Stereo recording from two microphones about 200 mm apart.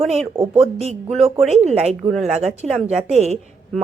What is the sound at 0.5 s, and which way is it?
Speech, 30° right (ahead or behind).